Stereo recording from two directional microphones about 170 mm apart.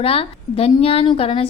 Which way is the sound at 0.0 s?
35° left (ahead or behind).